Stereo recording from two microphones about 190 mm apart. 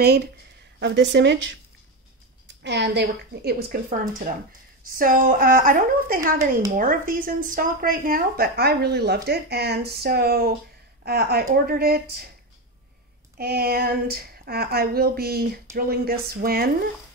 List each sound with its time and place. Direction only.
0.0 s a woman's voice: 55° right (ahead or behind)
13.4 s a woman's voice: 55° right (ahead or behind)